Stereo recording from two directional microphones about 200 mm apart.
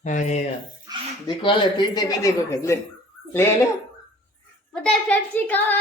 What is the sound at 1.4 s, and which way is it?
A woman's voice, 25° left (ahead or behind).